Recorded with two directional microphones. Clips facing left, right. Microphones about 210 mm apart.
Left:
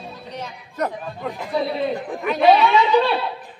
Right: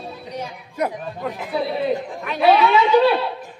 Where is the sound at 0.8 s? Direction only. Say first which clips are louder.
Right 1 dB; 10° right (ahead or behind).